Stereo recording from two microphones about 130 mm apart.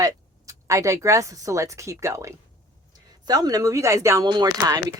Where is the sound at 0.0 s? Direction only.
25° right (ahead or behind).